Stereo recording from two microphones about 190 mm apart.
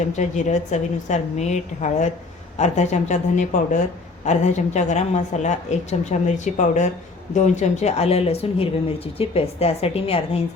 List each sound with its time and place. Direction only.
0.2 s a woman's voice: 40° left (ahead or behind)